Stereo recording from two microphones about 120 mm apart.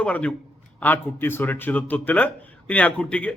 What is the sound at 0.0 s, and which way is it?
A man's voice, 10° left (ahead or behind).